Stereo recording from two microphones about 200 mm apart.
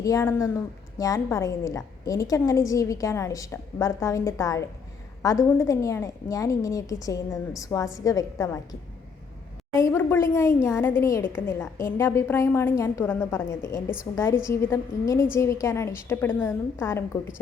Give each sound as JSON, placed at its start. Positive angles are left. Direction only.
{"t": 0.0, "sound": "a woman's voice", "side_deg": 15}
{"t": 9.7, "sound": "a woman's voice", "side_deg": 15}